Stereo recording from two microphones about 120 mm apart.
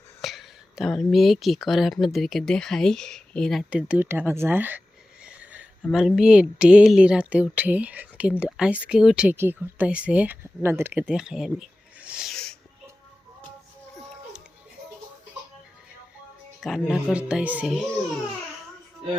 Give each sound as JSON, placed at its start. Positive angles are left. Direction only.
{"t": 0.2, "sound": "speech", "side_deg": 0}
{"t": 3.7, "sound": "speech", "side_deg": -10}
{"t": 9.3, "sound": "speech", "side_deg": -15}
{"t": 11.9, "sound": "a sound", "side_deg": -10}
{"t": 12.3, "sound": "a sound", "side_deg": 5}
{"t": 16.6, "sound": "speech", "side_deg": 0}